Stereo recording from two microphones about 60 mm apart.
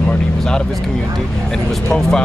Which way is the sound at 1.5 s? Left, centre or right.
Centre.